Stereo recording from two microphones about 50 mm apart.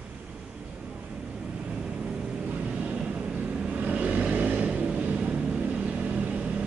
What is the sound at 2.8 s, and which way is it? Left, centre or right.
Vehicle, centre.